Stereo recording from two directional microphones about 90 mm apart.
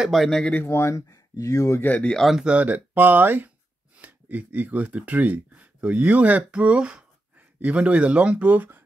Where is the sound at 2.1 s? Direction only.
Centre (ahead or behind).